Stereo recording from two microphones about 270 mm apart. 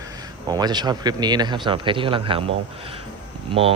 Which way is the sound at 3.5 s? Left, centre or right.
Right.